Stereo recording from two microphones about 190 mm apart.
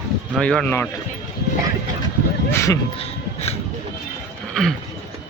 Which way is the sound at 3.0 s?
35° left (ahead or behind).